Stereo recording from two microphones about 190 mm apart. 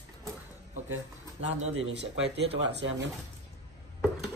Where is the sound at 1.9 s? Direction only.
65° right (ahead or behind).